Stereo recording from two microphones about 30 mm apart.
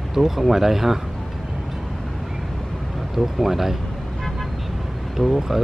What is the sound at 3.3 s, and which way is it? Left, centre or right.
Speech, centre.